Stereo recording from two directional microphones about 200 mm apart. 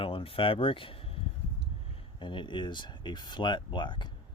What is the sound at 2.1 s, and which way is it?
Speech, 25° left (ahead or behind).